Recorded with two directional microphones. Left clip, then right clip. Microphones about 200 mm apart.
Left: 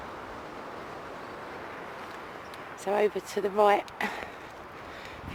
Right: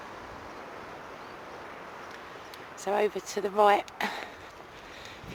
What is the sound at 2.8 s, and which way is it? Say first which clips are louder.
Speech: left 1 dB; 10° right (ahead or behind).